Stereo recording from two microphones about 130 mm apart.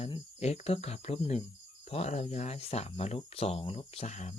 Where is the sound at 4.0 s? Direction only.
65° left (ahead or behind).